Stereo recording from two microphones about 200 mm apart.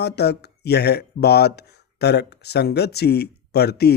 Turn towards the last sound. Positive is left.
turn(degrees=55)  # may be behind; listen again after turning